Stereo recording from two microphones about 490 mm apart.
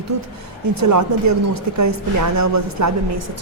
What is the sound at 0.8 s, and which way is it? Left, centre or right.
A woman's voice, right.